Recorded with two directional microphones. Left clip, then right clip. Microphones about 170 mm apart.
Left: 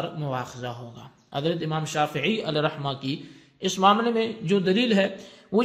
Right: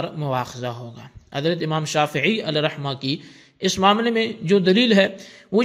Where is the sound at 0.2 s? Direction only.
40° right (ahead or behind).